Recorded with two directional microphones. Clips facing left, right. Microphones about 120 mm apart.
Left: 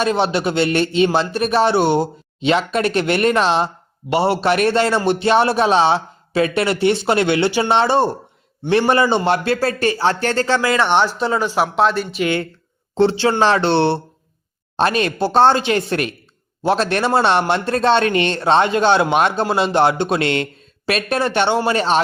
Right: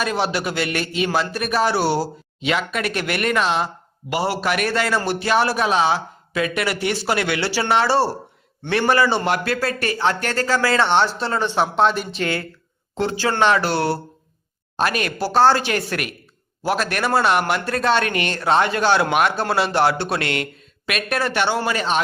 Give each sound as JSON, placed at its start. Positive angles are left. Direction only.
{"t": 0.0, "sound": "a man's voice", "side_deg": 25}
{"t": 12.2, "sound": "a man's voice", "side_deg": 20}
{"t": 12.9, "sound": "a man's voice", "side_deg": 30}